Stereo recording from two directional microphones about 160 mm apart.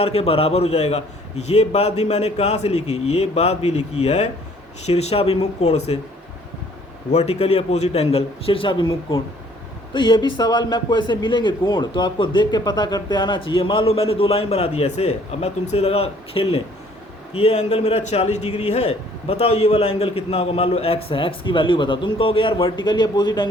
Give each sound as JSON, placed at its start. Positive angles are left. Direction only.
{"t": 0.0, "sound": "speech", "side_deg": 40}
{"t": 7.1, "sound": "speech", "side_deg": 40}